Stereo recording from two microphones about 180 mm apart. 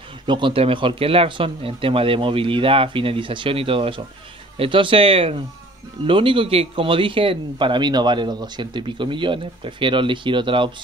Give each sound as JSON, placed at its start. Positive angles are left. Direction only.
{"t": 0.3, "sound": "a man's voice", "side_deg": -25}